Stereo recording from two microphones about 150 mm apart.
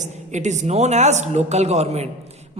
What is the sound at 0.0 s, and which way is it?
Speech, 50° right (ahead or behind).